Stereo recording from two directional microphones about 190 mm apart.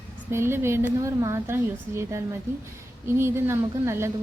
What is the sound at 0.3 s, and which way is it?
A woman's voice, 15° right (ahead or behind).